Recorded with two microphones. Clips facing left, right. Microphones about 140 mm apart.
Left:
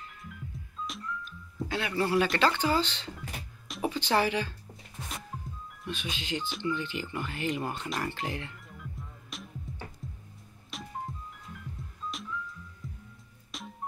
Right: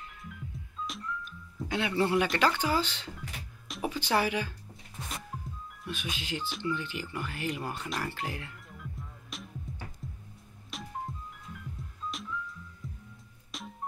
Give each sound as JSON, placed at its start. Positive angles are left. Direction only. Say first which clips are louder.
{"t": 0.2, "sound": "music", "louder": "even", "side_deg": 0}
{"t": 1.7, "sound": "a man's voice", "louder": "right 1 dB", "side_deg": -20}
{"t": 2.2, "sound": "speech", "louder": "left 1 dB", "side_deg": -10}
{"t": 5.3, "sound": "music", "louder": "even", "side_deg": 0}
{"t": 5.9, "sound": "speech", "louder": "left 1 dB", "side_deg": -5}
{"t": 7.7, "sound": "music", "louder": "left 2 dB", "side_deg": -5}